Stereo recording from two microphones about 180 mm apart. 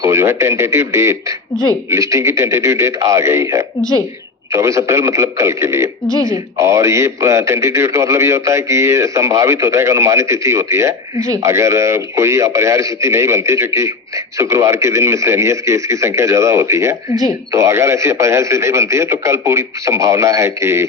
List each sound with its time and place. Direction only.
0.0 s a man's voice: 15° right (ahead or behind)